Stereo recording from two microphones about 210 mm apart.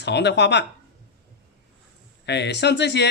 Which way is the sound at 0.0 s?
55° left (ahead or behind).